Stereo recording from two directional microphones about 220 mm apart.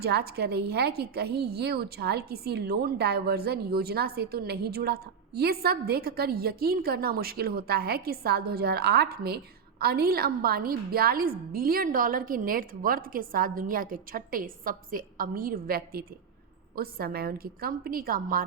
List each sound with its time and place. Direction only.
0.0 s a woman's voice: 45° right (ahead or behind)